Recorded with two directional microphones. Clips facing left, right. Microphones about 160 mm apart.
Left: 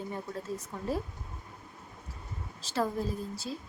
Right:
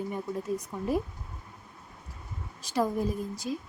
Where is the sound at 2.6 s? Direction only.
15° right (ahead or behind).